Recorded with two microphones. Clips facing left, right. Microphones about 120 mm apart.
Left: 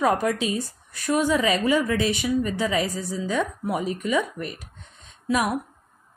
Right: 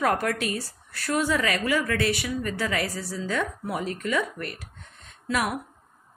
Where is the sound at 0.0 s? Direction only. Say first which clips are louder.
Left 3 dB; 15° left (ahead or behind).